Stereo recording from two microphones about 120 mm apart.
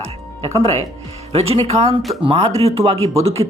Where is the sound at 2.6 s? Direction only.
55° right (ahead or behind).